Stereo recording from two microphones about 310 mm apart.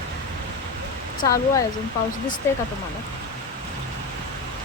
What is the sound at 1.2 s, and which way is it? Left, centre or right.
Speech, centre.